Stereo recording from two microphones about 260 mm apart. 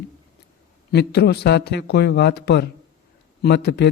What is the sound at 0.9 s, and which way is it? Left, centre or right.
Speech, left.